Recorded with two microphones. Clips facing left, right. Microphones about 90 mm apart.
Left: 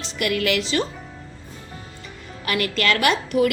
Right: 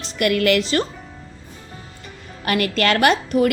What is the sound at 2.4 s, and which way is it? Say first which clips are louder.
A woman's voice: right 3 dB; 40° right (ahead or behind).